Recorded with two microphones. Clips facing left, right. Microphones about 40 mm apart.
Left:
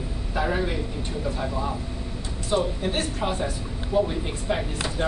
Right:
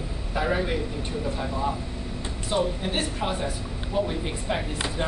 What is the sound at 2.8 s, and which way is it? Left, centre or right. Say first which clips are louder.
Speech: left 1 dB; centre.